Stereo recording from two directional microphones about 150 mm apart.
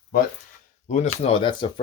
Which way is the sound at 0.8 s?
50° left (ahead or behind).